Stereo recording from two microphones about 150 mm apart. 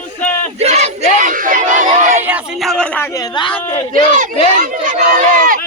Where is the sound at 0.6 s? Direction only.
45° right (ahead or behind).